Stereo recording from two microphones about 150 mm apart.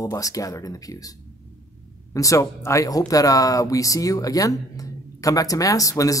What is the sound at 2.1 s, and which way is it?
Speech, 20° left (ahead or behind).